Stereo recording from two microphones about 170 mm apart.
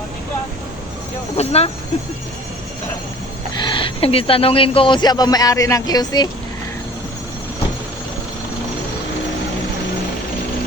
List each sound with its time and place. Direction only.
1.4 s speech: 35° left (ahead or behind)
3.6 s speech: 30° left (ahead or behind)